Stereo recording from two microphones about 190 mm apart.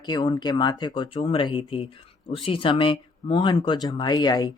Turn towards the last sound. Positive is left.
turn(degrees=20)  # may be behind; listen again after turning